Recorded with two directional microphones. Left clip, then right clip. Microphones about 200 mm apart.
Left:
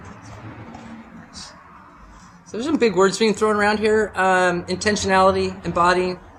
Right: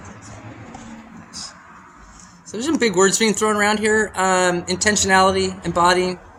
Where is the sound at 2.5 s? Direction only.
20° right (ahead or behind).